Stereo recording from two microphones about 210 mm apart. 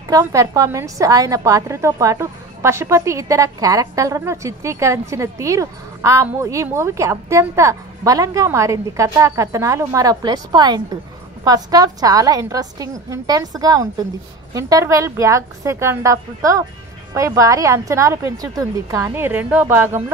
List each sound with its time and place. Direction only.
0.1 s a woman's voice: 15° right (ahead or behind)